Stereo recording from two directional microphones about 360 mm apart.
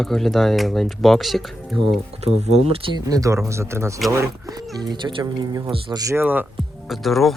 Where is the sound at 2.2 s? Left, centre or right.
Centre.